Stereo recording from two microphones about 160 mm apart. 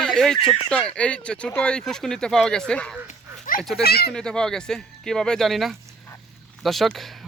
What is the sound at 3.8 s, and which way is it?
Speech, 75° left (ahead or behind).